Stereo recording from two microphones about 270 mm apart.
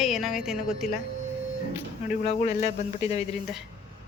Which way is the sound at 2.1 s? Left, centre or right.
Left.